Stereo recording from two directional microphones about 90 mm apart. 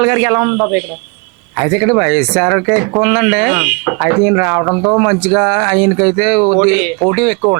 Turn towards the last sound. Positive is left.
turn(degrees=-15)  # may be behind; listen again after turning